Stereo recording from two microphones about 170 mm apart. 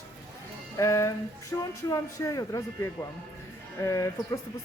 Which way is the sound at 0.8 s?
15° left (ahead or behind).